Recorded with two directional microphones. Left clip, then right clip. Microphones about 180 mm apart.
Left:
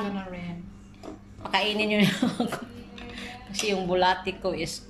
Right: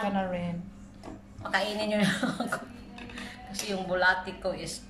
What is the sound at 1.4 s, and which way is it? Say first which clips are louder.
Speech: left 4 dB; 10° left (ahead or behind).